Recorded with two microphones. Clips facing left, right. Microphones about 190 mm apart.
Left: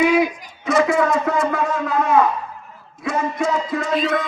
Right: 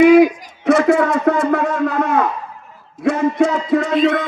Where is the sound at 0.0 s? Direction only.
50° right (ahead or behind).